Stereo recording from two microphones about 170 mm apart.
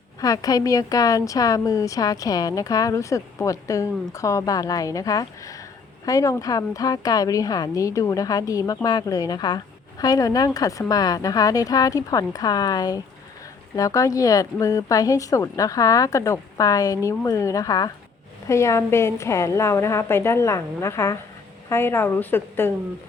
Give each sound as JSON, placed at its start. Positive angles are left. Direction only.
{"t": 0.2, "sound": "a woman's voice", "side_deg": 20}